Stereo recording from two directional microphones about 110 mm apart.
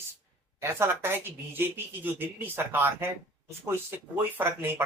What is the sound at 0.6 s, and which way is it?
Speech, 25° right (ahead or behind).